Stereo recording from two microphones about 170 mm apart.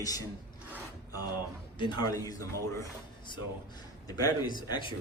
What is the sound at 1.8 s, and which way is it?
Speech, 25° left (ahead or behind).